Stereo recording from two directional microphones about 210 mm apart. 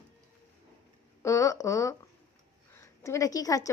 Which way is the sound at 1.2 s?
15° left (ahead or behind).